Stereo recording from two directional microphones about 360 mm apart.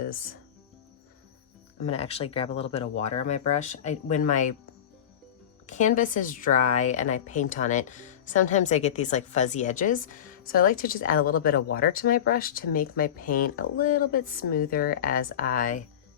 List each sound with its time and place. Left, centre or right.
1.8 s speech: centre
5.6 s speech: centre